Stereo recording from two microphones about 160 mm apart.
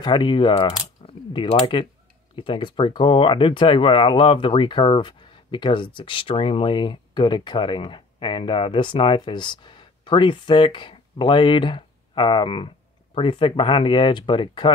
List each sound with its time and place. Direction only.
0.0 s speech: 30° left (ahead or behind)